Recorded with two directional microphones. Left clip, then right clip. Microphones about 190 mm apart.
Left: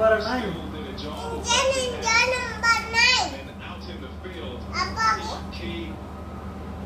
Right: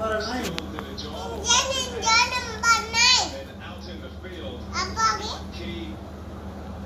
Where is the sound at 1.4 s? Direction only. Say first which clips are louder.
Left 1 dB; 15° left (ahead or behind).